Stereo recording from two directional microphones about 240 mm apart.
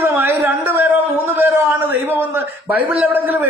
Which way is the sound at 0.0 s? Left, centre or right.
Centre.